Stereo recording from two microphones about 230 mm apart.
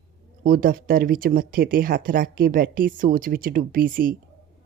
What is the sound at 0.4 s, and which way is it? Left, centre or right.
Speech, right.